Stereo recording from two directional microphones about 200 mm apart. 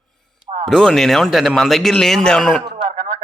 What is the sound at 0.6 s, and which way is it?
Speech, 5° left (ahead or behind).